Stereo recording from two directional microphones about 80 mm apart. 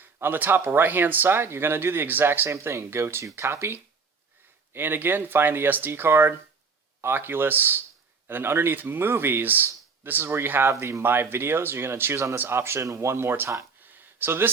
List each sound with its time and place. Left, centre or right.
0.0 s speech: right